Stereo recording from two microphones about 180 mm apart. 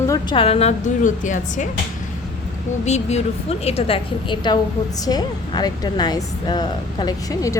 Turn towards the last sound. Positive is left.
turn(degrees=20)  # may be behind; listen again after turning